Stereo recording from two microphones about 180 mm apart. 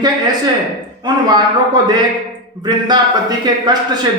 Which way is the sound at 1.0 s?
25° right (ahead or behind).